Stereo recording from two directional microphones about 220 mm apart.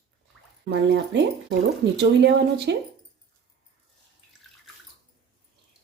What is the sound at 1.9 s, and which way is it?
Speech, 50° right (ahead or behind).